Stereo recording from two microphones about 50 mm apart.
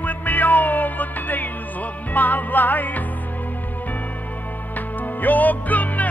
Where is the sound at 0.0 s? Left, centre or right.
Left.